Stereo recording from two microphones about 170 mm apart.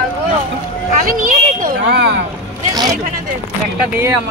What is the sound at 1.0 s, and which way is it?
Speech, 55° right (ahead or behind).